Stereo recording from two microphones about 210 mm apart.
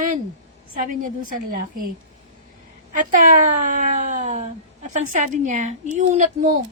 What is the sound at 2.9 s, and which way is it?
Speech, 40° right (ahead or behind).